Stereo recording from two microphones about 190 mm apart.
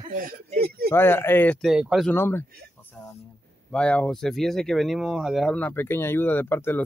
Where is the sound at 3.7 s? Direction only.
5° left (ahead or behind).